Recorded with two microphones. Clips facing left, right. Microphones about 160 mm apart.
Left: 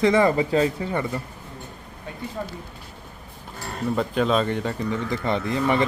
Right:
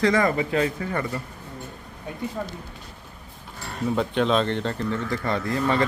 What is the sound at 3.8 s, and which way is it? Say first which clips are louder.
Speech: even; centre (ahead or behind).